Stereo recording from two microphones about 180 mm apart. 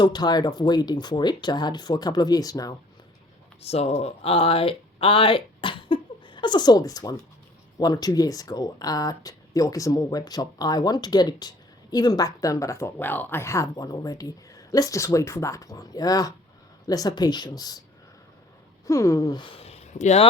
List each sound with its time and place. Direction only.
0.0 s speech: 25° left (ahead or behind)
3.6 s speech: 35° left (ahead or behind)
18.9 s speech: 15° left (ahead or behind); by 20.2 s 40° left (ahead or behind)